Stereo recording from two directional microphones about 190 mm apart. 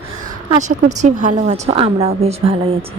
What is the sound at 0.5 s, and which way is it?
Speech, 40° right (ahead or behind).